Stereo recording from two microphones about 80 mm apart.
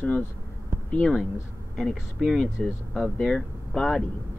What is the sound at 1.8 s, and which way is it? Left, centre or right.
Speech, centre.